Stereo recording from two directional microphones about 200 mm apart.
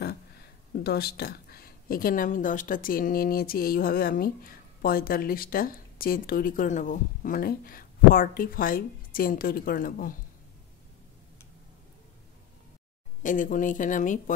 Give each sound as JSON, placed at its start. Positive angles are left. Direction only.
{"t": 0.8, "sound": "a woman's voice", "side_deg": 50}
{"t": 13.2, "sound": "speech", "side_deg": 40}